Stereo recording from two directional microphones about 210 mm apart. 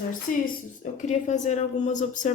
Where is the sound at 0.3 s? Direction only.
40° left (ahead or behind).